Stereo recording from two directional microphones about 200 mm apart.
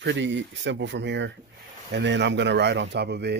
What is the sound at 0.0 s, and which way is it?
Speech, 65° right (ahead or behind).